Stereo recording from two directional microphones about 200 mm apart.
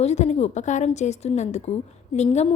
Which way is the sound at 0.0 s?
35° left (ahead or behind).